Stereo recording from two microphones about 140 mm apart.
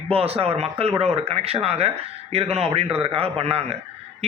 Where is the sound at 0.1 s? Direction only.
45° right (ahead or behind).